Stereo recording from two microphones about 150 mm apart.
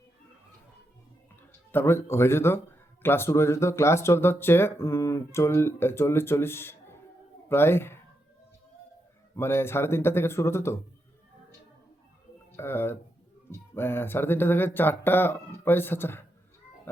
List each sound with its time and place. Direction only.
1.7 s speech: 15° left (ahead or behind)
9.3 s speech: 15° left (ahead or behind)
12.5 s speech: 15° left (ahead or behind)